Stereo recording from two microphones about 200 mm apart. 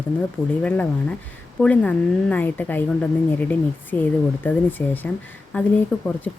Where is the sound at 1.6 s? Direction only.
5° left (ahead or behind).